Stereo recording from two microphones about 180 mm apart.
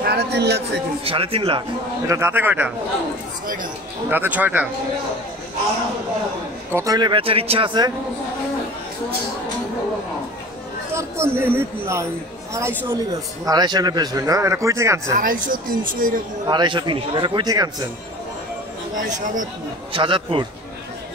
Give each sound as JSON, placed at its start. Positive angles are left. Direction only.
{"t": 0.0, "sound": "speech", "side_deg": -65}
{"t": 1.0, "sound": "speech", "side_deg": -30}
{"t": 2.0, "sound": "a man's voice", "side_deg": -15}
{"t": 4.1, "sound": "a man's voice", "side_deg": -10}
{"t": 6.7, "sound": "speech", "side_deg": -20}
{"t": 10.9, "sound": "a man's voice", "side_deg": -15}
{"t": 15.1, "sound": "speech", "side_deg": -45}
{"t": 16.4, "sound": "speech", "side_deg": -25}
{"t": 18.9, "sound": "speech", "side_deg": -45}
{"t": 19.9, "sound": "speech", "side_deg": -30}